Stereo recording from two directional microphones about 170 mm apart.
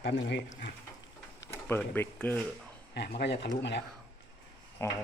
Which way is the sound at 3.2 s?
85° left.